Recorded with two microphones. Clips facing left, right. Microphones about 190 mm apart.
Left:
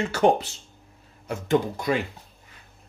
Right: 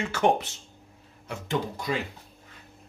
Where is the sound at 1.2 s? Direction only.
50° left (ahead or behind).